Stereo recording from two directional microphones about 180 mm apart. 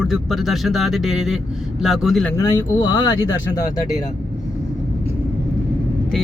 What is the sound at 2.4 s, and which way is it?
Speech, 20° left (ahead or behind).